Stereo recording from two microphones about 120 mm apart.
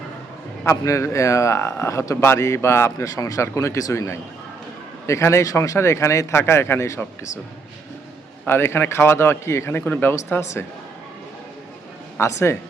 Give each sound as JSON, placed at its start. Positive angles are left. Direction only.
{"t": 0.6, "sound": "a man's voice", "side_deg": 25}
{"t": 8.4, "sound": "a man's voice", "side_deg": 20}
{"t": 12.1, "sound": "speech", "side_deg": 20}